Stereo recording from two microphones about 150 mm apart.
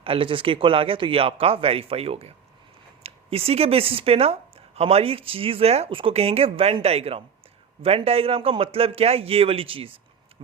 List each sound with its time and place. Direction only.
0.0 s speech: 35° right (ahead or behind)